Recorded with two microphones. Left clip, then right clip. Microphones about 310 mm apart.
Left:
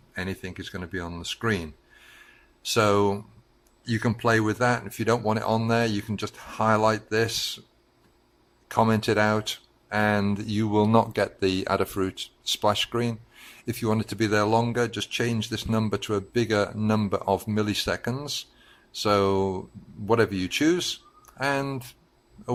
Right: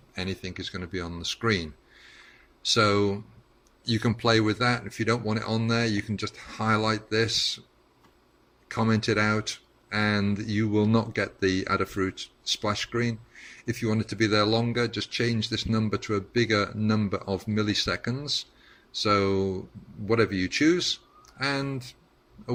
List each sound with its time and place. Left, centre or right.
0.1 s speech: centre
2.6 s speech: centre
8.9 s speech: centre
13.3 s a sound: centre
14.0 s speech: centre
19.0 s speech: centre
19.4 s speech: left
20.1 s a man's voice: centre